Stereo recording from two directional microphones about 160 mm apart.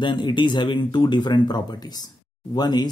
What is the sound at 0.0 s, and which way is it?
A man's voice, 30° left (ahead or behind).